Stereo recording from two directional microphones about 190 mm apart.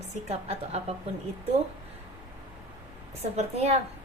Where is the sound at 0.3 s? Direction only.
35° right (ahead or behind).